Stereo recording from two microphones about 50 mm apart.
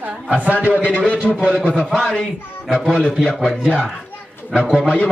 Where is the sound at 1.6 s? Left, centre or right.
Left.